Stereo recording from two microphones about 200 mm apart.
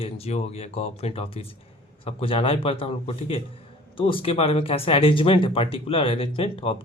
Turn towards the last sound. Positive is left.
turn(degrees=25)  # may be behind; listen again after turning